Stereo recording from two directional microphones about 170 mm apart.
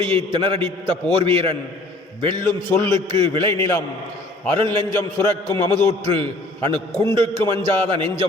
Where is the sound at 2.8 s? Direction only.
30° right (ahead or behind).